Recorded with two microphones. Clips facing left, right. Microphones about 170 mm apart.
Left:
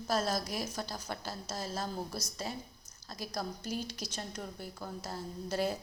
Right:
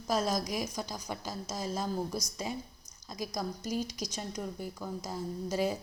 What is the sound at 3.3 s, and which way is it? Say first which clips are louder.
A woman's voice: right 1 dB; 15° right (ahead or behind).